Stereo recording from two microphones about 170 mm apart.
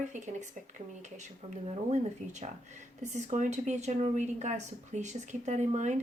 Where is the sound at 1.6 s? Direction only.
40° right (ahead or behind).